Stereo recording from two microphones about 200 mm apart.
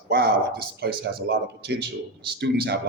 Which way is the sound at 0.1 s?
50° right (ahead or behind).